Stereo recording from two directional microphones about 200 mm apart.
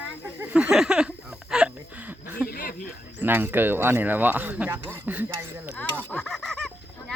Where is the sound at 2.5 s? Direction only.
45° left (ahead or behind).